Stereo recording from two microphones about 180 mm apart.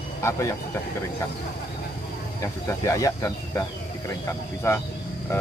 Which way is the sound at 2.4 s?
15° left (ahead or behind).